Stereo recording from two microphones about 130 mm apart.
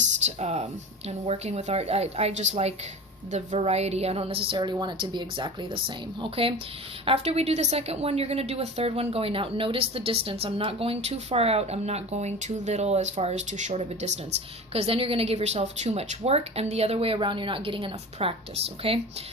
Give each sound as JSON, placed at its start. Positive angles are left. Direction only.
{"t": 0.3, "sound": "a woman's voice", "side_deg": -55}
{"t": 14.7, "sound": "a woman's voice", "side_deg": -50}